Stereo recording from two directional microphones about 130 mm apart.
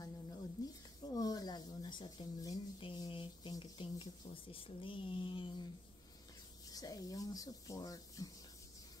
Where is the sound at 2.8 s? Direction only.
40° left (ahead or behind).